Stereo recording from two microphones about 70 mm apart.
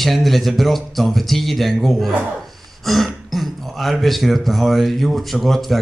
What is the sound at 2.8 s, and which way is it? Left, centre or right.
Speech, centre.